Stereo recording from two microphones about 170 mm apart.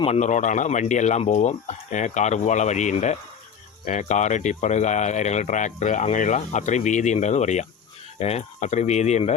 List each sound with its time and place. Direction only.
0.0 s speech: 40° left (ahead or behind)